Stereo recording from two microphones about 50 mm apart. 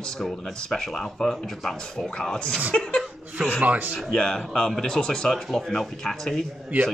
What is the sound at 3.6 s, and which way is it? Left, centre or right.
Speech, right.